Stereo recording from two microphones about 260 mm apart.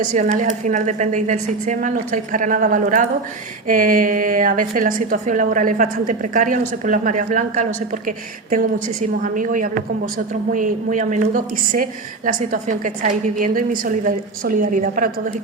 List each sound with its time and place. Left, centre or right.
0.1 s a woman's voice: right